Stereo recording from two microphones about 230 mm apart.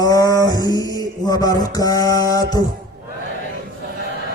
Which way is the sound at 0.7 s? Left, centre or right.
Centre.